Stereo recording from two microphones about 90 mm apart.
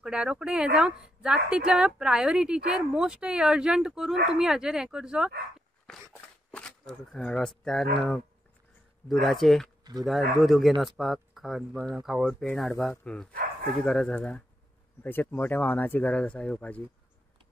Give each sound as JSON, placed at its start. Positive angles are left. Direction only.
{"t": 0.0, "sound": "a woman's voice", "side_deg": -10}
{"t": 6.5, "sound": "speech", "side_deg": 10}
{"t": 13.0, "sound": "speech", "side_deg": 10}